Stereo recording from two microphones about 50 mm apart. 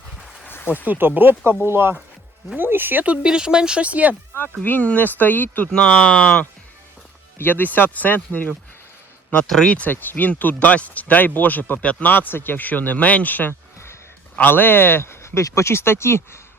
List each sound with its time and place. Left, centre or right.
0.4 s a sound: left
0.9 s speech: right
3.2 s speech: centre
4.6 s speech: left
5.7 s speech: left
7.3 s speech: left
9.6 s speech: left
9.9 s speech: left